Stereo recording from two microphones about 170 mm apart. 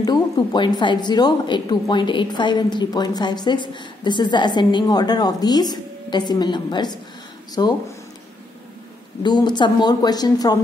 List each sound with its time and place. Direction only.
0.0 s a woman's voice: 25° left (ahead or behind)
9.2 s a woman's voice: 25° left (ahead or behind)